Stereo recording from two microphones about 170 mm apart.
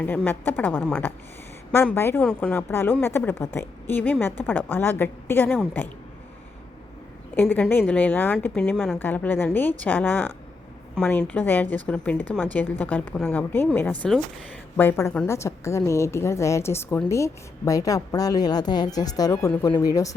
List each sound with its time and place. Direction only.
0.0 s a woman's voice: 10° left (ahead or behind)
7.3 s a woman's voice: 10° left (ahead or behind)
14.8 s a woman's voice: 15° left (ahead or behind)